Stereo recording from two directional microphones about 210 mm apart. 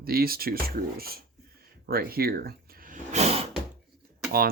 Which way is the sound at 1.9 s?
45° right (ahead or behind).